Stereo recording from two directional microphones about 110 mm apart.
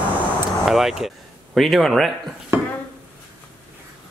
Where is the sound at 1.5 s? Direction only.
Centre (ahead or behind).